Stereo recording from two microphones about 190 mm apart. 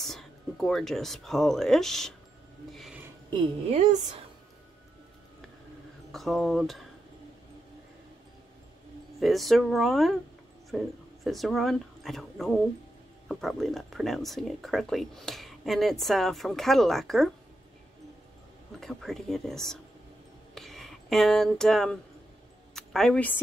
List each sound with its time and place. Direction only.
0.0 s speech: centre (ahead or behind)
2.7 s a sound: centre (ahead or behind)
3.7 s a woman's voice: 40° right (ahead or behind)
6.1 s speech: centre (ahead or behind)
9.2 s speech: centre (ahead or behind)
18.8 s speech: centre (ahead or behind)
20.5 s a sound: centre (ahead or behind)
22.8 s speech: centre (ahead or behind)